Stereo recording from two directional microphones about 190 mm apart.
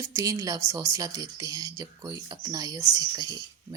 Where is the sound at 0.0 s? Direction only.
15° right (ahead or behind).